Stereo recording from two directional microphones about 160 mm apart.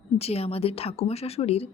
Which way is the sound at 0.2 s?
40° left (ahead or behind).